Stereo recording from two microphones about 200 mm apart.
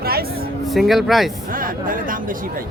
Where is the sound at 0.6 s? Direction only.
Centre (ahead or behind).